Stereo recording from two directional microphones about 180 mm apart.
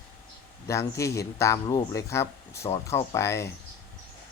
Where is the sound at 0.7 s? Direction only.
15° left (ahead or behind).